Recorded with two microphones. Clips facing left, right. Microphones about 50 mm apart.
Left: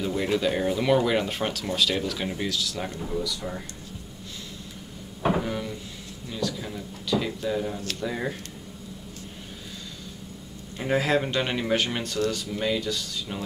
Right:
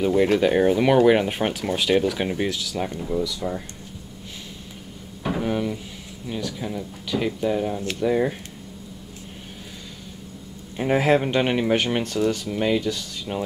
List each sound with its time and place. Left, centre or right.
0.0 s speech: right
5.4 s a sound: right
6.2 s speech: right
6.6 s speech: centre
10.8 s speech: right